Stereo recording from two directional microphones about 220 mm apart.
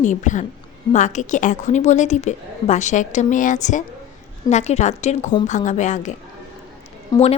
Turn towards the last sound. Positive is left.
turn(degrees=15)  # may be behind; listen again after turning